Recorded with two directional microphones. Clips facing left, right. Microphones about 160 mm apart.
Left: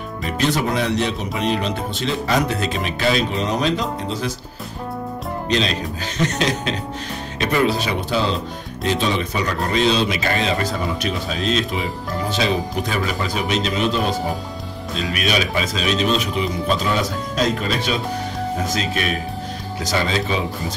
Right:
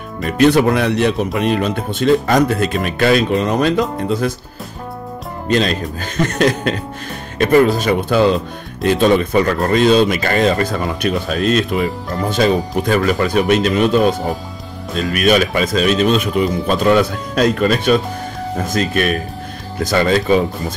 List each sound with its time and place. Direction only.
0.4 s speech: 60° right (ahead or behind)
5.5 s speech: 50° right (ahead or behind)